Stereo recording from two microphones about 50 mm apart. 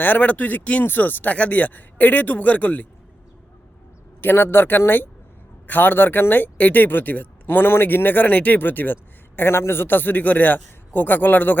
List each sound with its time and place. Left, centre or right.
0.0 s speech: left
4.2 s speech: left